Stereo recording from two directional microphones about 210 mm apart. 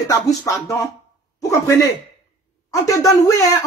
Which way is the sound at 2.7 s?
15° left (ahead or behind).